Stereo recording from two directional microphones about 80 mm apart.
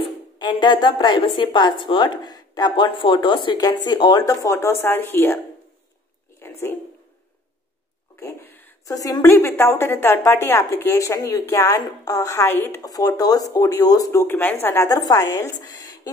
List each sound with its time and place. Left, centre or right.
0.4 s a woman's voice: left
3.6 s speech: left
4.2 s speech: left
6.4 s a sound: left
8.2 s speech: left
8.8 s speech: left
9.2 s speech: left
12.8 s speech: left
14.1 s speech: left
14.9 s speech: left